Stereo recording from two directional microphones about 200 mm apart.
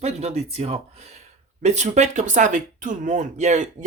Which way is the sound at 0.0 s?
35° right (ahead or behind).